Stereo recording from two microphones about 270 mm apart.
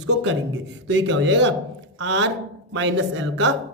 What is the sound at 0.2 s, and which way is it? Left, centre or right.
A man's voice, right.